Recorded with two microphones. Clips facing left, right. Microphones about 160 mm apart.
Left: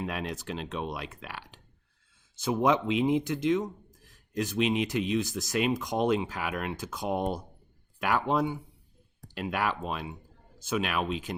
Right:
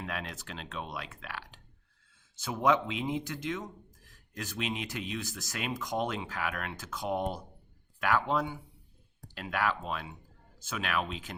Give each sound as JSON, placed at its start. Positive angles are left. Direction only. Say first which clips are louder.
{"t": 0.0, "sound": "speech", "louder": "left 5 dB", "side_deg": 20}